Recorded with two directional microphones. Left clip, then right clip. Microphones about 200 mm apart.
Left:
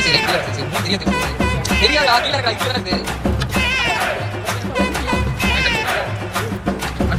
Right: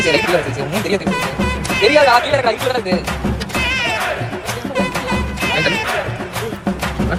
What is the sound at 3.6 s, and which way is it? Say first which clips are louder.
Music: even; centre (ahead or behind).